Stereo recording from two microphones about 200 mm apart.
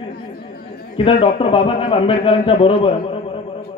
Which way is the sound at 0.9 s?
25° left (ahead or behind).